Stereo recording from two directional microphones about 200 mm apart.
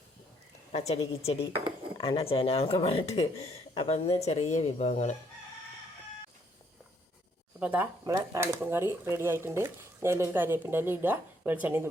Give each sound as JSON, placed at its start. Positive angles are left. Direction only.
{"t": 0.7, "sound": "a woman's voice", "side_deg": 35}
{"t": 7.6, "sound": "speech", "side_deg": -10}